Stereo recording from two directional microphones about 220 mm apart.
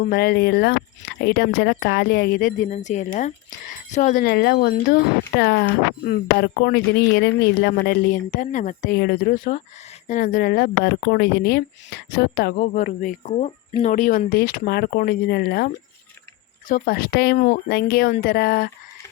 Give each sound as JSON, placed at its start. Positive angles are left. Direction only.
{"t": 0.0, "sound": "speech", "side_deg": 45}